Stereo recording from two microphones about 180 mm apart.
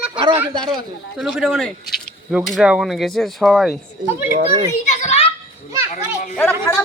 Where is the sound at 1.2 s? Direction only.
Centre (ahead or behind).